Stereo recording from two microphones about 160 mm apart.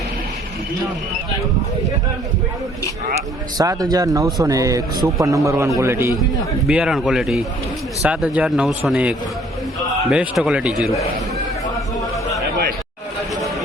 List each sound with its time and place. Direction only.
3.6 s a man's voice: 25° right (ahead or behind); by 11.0 s 5° right (ahead or behind)